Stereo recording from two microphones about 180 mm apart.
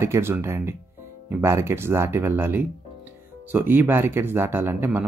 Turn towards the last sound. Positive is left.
turn(degrees=-10)  # may be behind; listen again after turning